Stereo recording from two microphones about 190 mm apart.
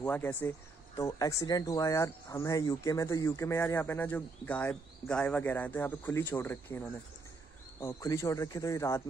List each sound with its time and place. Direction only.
0.0 s speech: 10° left (ahead or behind)